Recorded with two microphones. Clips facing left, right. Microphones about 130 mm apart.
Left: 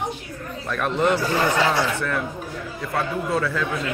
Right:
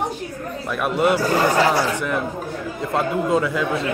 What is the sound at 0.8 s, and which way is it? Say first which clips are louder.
Speech: right 2 dB; 10° right (ahead or behind).